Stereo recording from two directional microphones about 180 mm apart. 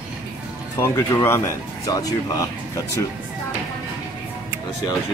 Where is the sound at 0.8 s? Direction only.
15° left (ahead or behind).